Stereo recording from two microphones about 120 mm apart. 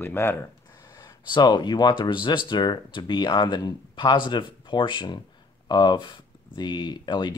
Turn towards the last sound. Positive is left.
turn(degrees=40)  # may be behind; listen again after turning